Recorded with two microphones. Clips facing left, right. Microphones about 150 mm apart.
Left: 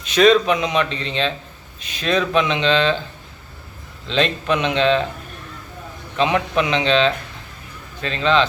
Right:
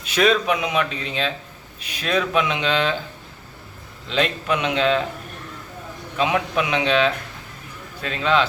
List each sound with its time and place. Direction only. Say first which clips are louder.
0.0 s speech: left 5 dB; 10° right (ahead or behind)
4.0 s speech: left 2 dB; 10° right (ahead or behind)
6.1 s speech: left 3 dB; 10° right (ahead or behind)